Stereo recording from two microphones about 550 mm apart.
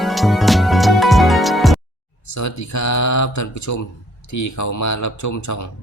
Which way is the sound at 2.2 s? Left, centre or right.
Left.